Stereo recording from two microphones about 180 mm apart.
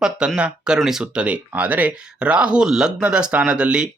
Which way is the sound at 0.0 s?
5° right (ahead or behind).